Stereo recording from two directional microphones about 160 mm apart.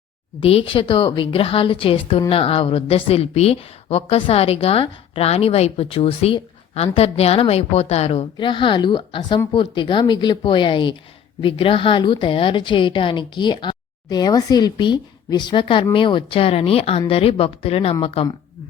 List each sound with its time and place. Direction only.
0.3 s a woman's voice: 35° left (ahead or behind)